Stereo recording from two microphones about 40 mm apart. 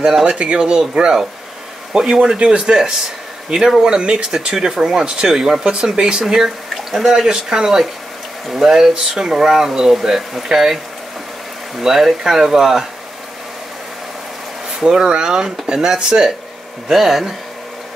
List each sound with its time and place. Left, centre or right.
0.0 s speech: centre
5.6 s speech: right
11.8 s speech: centre
14.8 s speech: centre